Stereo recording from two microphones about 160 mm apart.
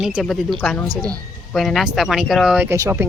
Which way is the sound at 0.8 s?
25° right (ahead or behind).